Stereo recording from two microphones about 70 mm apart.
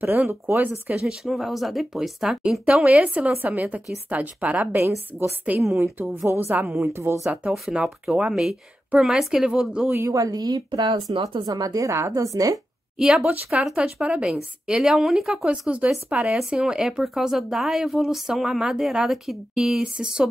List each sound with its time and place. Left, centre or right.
0.0 s a woman's voice: right
1.2 s speech: centre
2.7 s a woman's voice: right
4.7 s a woman's voice: right
7.7 s a woman's voice: centre
10.0 s speech: right
11.9 s a woman's voice: right
13.2 s a woman's voice: right